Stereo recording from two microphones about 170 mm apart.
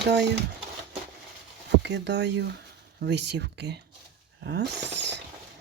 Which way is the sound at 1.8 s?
90° right.